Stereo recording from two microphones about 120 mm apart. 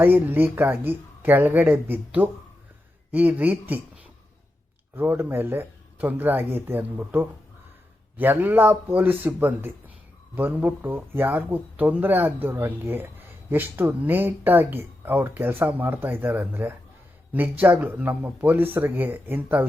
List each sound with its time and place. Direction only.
0.0 s speech: 15° right (ahead or behind)